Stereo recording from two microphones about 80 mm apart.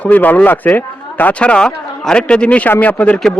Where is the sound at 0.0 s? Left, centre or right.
Left.